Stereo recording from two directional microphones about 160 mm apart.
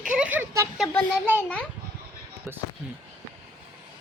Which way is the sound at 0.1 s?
10° right (ahead or behind).